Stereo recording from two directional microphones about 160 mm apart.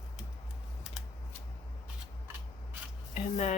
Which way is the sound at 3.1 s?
45° left (ahead or behind).